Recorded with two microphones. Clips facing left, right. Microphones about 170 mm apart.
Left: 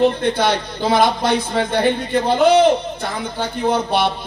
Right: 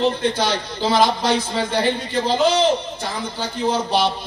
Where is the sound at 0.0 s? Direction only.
60° left (ahead or behind).